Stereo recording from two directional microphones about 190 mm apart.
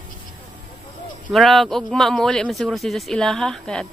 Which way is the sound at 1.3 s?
Centre (ahead or behind).